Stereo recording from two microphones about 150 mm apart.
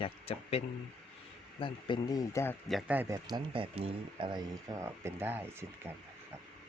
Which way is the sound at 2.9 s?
15° right (ahead or behind).